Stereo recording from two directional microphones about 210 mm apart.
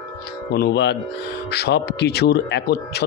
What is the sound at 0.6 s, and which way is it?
Speech, 50° left (ahead or behind).